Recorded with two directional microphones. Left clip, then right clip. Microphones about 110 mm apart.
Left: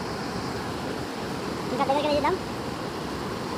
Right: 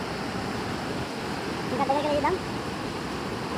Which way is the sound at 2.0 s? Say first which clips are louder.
Left 1 dB; 5° left (ahead or behind).